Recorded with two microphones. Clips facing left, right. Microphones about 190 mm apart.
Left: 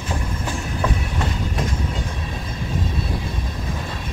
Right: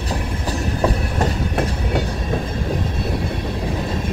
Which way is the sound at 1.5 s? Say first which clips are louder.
Right 5 dB; 65° right (ahead or behind).